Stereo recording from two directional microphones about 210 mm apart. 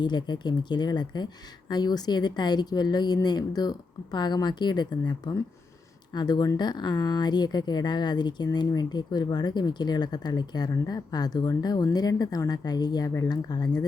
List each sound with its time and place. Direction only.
0.0 s speech: 20° left (ahead or behind)